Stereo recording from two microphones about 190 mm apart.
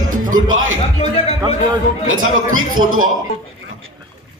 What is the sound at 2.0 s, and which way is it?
A man's voice, 90° right.